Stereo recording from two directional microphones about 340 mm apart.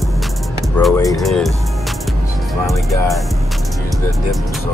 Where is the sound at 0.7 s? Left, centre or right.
Centre.